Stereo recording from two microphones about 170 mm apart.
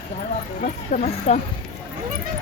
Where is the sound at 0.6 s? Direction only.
45° left (ahead or behind).